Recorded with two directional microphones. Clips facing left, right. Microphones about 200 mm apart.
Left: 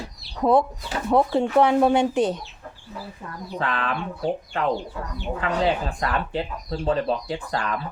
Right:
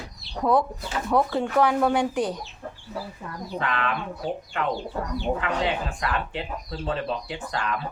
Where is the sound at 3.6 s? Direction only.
35° left (ahead or behind).